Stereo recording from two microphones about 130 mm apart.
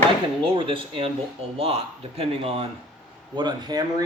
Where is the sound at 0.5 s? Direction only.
40° right (ahead or behind).